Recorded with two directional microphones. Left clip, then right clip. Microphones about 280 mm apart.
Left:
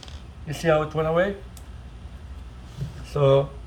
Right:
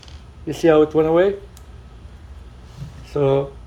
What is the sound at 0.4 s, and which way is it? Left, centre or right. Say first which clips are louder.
Speech: right 7 dB; right.